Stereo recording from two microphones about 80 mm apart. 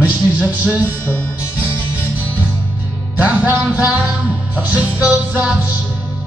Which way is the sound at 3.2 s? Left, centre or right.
Right.